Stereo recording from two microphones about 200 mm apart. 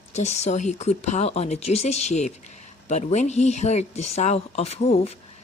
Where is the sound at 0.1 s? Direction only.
35° left (ahead or behind).